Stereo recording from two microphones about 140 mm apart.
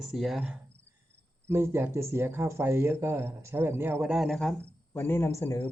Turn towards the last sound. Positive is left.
turn(degrees=20)  # may be behind; listen again after turning